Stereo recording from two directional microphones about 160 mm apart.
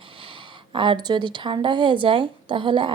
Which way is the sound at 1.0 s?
30° right (ahead or behind).